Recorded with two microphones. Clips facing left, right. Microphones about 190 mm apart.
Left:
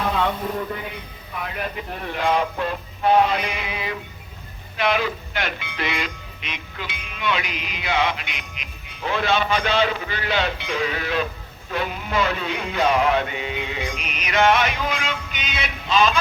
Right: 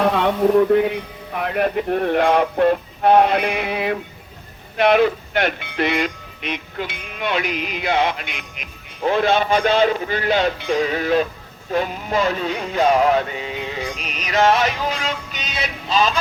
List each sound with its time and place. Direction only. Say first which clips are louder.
0.5 s speech: right 14 dB; 60° right (ahead or behind); by 11.3 s 40° right (ahead or behind)
11.7 s music: right 4 dB; 40° right (ahead or behind)